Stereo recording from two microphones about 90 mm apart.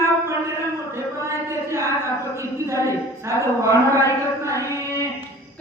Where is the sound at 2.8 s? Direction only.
35° right (ahead or behind).